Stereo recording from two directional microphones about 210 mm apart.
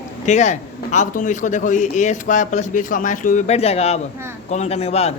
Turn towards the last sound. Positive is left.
turn(degrees=30)  # may be behind; listen again after turning